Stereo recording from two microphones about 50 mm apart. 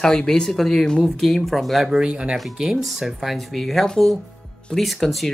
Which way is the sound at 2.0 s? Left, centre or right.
Centre.